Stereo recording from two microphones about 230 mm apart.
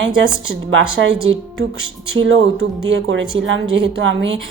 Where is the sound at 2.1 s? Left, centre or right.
Right.